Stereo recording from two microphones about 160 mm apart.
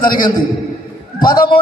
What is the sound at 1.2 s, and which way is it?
Speech, 25° left (ahead or behind).